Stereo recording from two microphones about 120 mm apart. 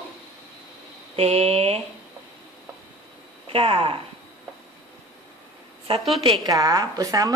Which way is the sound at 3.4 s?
50° right (ahead or behind).